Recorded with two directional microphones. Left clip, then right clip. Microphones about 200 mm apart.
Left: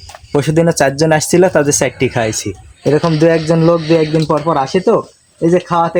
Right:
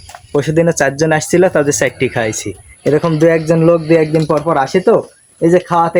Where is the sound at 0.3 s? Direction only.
35° left (ahead or behind).